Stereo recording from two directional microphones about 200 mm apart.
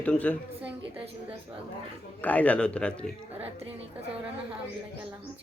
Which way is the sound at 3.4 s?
30° right (ahead or behind).